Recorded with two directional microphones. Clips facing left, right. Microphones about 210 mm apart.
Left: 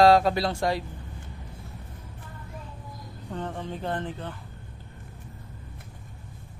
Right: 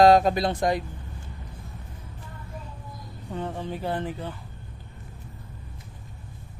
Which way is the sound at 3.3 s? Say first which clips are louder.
Right 2 dB; 10° right (ahead or behind).